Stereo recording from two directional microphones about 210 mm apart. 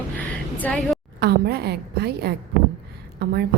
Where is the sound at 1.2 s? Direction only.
50° right (ahead or behind).